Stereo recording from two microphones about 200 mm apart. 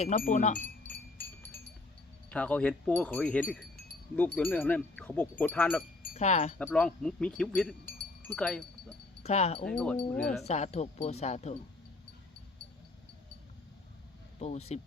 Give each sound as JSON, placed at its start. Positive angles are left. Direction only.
{"t": 0.0, "sound": "speech", "side_deg": 40}
{"t": 0.9, "sound": "music", "side_deg": 10}
{"t": 2.3, "sound": "speech", "side_deg": 5}
{"t": 4.1, "sound": "wind chime", "side_deg": 5}
{"t": 6.1, "sound": "speech", "side_deg": 30}
{"t": 6.6, "sound": "speech", "side_deg": 5}
{"t": 9.2, "sound": "speech", "side_deg": 30}
{"t": 9.6, "sound": "speech", "side_deg": 5}
{"t": 10.4, "sound": "speech", "side_deg": 35}
{"t": 14.3, "sound": "speech", "side_deg": 30}